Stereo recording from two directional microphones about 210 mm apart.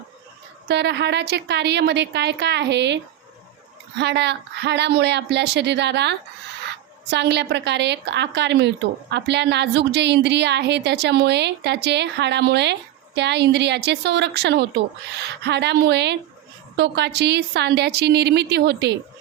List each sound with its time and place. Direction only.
0.7 s a woman's voice: 55° right (ahead or behind)